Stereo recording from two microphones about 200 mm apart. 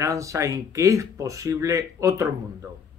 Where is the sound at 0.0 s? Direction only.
15° right (ahead or behind).